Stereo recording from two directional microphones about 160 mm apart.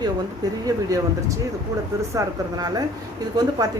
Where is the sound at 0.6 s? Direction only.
20° right (ahead or behind).